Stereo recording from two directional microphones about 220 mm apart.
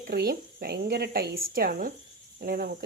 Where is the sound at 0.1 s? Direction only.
45° right (ahead or behind).